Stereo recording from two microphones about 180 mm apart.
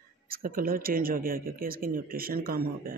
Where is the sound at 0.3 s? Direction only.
50° right (ahead or behind).